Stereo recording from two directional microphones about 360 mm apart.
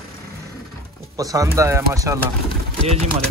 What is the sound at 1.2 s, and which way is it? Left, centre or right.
Speech, centre.